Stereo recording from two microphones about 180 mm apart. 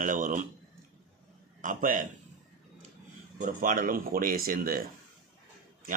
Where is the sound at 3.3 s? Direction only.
45° right (ahead or behind).